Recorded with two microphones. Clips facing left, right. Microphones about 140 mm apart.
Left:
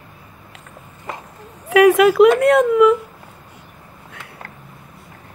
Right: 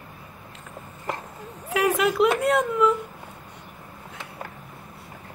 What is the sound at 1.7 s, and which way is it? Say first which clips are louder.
A woman's voice: left 11 dB; 75° left (ahead or behind).